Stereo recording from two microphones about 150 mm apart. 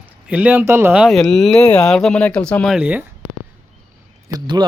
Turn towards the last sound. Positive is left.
turn(degrees=-30)  # may be behind; listen again after turning